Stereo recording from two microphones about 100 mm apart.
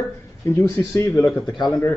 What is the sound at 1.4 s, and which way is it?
Speech, 50° left (ahead or behind).